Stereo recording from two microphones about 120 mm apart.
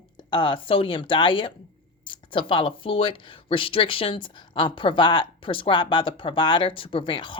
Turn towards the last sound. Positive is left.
turn(degrees=40)  # may be behind; listen again after turning